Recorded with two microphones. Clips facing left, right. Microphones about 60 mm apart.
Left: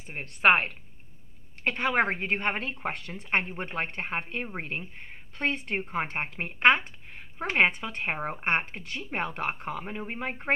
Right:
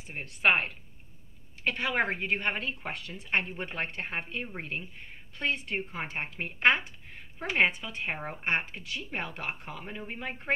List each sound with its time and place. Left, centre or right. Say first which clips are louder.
0.1 s a woman's voice: left 4 dB; left